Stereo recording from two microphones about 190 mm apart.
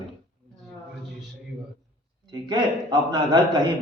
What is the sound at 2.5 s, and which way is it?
Speech, 20° right (ahead or behind).